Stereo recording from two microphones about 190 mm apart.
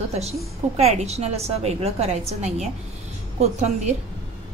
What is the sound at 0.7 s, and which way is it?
Speech, 35° right (ahead or behind).